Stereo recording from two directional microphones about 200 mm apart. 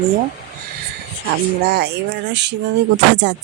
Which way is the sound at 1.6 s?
55° right (ahead or behind).